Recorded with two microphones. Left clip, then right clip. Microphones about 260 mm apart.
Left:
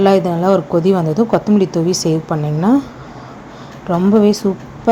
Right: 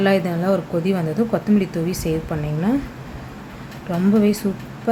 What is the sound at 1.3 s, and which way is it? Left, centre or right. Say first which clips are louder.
Speech: left 7 dB; centre.